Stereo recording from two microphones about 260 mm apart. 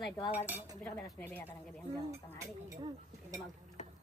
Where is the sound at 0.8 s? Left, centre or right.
Centre.